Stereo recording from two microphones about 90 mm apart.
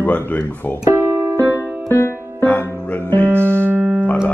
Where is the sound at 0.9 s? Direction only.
25° right (ahead or behind).